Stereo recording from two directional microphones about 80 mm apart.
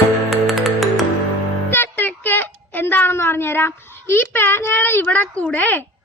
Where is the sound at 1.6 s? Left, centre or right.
Left.